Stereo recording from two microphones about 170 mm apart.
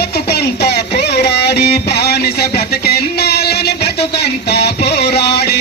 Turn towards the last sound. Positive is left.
turn(degrees=75)  # may be behind; listen again after turning